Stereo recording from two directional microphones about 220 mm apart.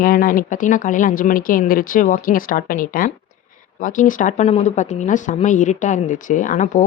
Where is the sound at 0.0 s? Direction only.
40° left (ahead or behind).